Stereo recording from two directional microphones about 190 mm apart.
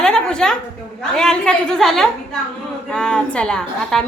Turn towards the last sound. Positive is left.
turn(degrees=5)  # may be behind; listen again after turning